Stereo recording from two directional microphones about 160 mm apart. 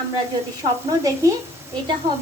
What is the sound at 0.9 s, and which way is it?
Speech, 20° right (ahead or behind).